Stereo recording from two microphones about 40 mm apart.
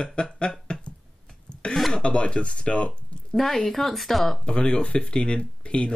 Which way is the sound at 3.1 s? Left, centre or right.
Left.